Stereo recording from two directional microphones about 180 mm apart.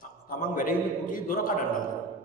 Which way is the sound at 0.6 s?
50° left (ahead or behind).